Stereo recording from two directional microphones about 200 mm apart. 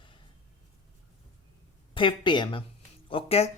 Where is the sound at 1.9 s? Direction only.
25° left (ahead or behind).